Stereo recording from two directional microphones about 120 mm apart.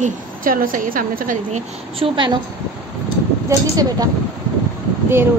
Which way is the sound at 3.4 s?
30° right (ahead or behind).